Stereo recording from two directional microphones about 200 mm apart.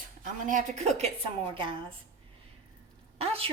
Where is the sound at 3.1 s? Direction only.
30° right (ahead or behind).